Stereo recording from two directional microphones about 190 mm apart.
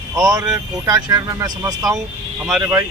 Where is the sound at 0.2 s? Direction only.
20° right (ahead or behind).